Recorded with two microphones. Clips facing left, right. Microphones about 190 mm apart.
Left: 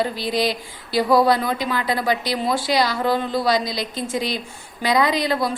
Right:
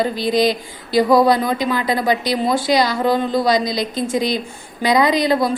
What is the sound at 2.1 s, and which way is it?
Speech, 5° left (ahead or behind).